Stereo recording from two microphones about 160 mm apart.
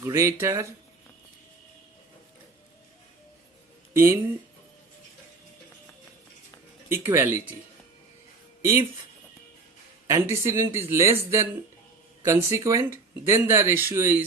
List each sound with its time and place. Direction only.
0.0 s speech: 15° right (ahead or behind)
3.9 s speech: 15° right (ahead or behind)
6.8 s speech: 15° right (ahead or behind)
10.1 s speech: 15° right (ahead or behind)